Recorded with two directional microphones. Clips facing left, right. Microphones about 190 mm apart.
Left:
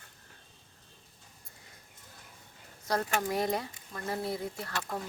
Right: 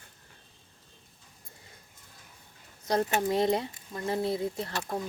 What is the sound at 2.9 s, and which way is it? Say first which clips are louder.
Speech: right 4 dB; 25° right (ahead or behind).